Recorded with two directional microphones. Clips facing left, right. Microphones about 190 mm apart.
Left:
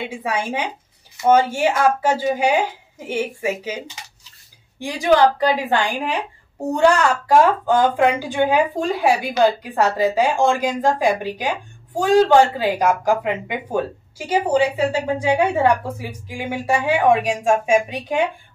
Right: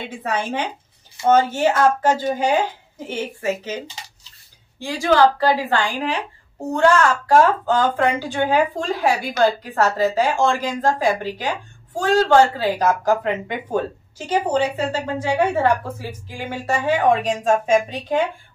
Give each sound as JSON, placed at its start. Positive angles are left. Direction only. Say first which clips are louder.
{"t": 0.1, "sound": "a woman's voice", "louder": "even", "side_deg": 10}